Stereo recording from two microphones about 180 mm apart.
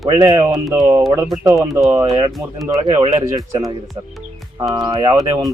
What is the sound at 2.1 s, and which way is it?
Speech, 25° right (ahead or behind).